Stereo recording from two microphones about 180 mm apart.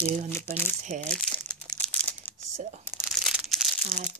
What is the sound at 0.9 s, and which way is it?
Speech, 45° right (ahead or behind).